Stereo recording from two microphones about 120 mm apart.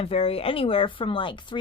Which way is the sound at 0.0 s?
55° left (ahead or behind).